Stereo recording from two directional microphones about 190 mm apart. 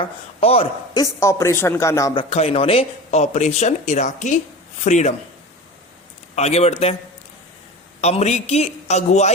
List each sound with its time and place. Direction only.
0.0 s speech: 30° left (ahead or behind)
1.2 s a man's voice: 15° left (ahead or behind)
2.3 s speech: 30° left (ahead or behind)
6.3 s speech: 35° left (ahead or behind)
8.0 s speech: 35° left (ahead or behind)